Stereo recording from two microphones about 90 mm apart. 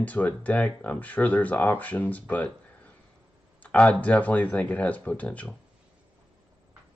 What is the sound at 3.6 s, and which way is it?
Speech, 15° left (ahead or behind).